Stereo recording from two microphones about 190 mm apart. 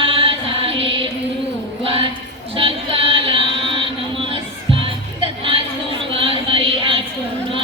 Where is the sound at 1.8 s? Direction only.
30° right (ahead or behind).